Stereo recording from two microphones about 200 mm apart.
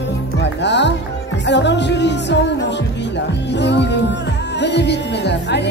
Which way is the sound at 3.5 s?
60° left (ahead or behind).